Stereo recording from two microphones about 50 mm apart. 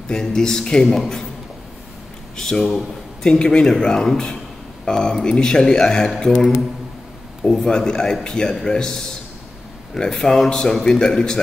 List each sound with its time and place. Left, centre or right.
0.1 s speech: centre
2.3 s speech: centre
3.3 s speech: centre
7.5 s speech: centre